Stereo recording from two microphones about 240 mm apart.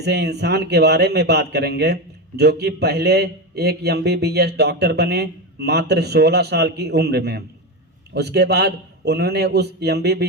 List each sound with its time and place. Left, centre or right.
0.0 s a man's voice: right